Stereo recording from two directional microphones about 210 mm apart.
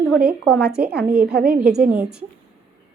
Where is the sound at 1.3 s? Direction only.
45° right (ahead or behind).